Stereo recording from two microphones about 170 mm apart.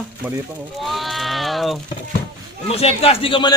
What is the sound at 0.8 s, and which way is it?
Sheep, centre (ahead or behind).